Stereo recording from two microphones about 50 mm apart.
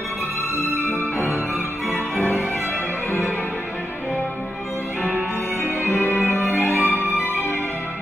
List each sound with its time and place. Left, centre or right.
5.9 s music: left